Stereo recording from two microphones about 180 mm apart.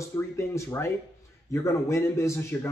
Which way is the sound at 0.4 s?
15° left (ahead or behind).